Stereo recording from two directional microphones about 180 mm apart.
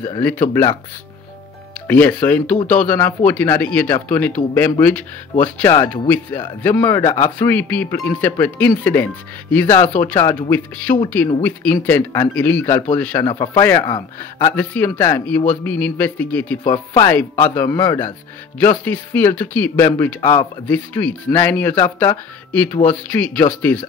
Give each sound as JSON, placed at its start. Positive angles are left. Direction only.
{"t": 0.2, "sound": "speech", "side_deg": 10}
{"t": 1.9, "sound": "speech", "side_deg": 10}
{"t": 14.5, "sound": "speech", "side_deg": 10}
{"t": 16.6, "sound": "a man's voice", "side_deg": 20}
{"t": 20.6, "sound": "speech", "side_deg": 10}